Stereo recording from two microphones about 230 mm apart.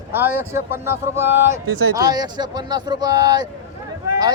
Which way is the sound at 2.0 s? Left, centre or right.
Centre.